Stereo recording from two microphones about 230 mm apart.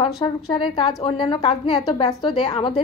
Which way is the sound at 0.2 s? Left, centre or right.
Left.